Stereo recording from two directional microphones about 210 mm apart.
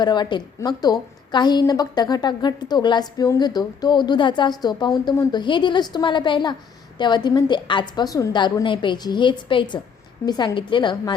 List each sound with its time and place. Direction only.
0.0 s a woman's voice: 20° left (ahead or behind)